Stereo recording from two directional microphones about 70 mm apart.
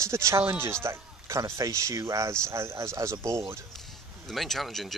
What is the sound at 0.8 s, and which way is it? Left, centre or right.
Speech, right.